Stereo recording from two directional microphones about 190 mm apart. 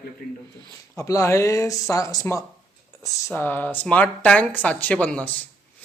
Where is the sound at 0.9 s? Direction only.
15° left (ahead or behind).